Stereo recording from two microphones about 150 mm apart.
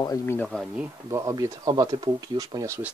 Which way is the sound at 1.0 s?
20° right (ahead or behind).